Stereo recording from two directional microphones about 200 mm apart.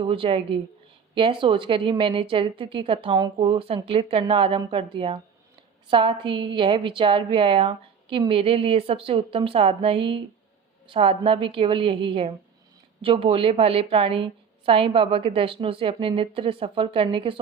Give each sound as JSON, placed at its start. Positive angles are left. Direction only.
{"t": 0.0, "sound": "a woman's voice", "side_deg": -25}